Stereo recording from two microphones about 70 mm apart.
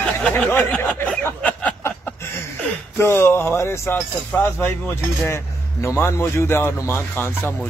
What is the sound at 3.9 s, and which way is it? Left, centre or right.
Speech, left.